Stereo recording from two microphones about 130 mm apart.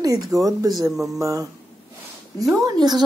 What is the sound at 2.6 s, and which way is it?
Speech, 30° right (ahead or behind).